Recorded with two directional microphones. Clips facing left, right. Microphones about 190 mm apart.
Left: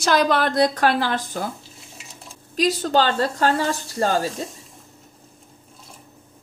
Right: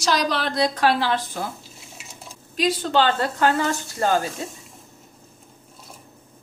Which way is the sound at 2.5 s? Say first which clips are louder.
Left 1 dB; 40° left (ahead or behind).